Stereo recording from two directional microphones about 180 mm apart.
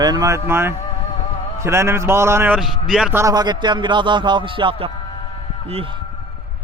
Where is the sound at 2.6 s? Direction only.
5° right (ahead or behind); by 6.0 s 30° right (ahead or behind).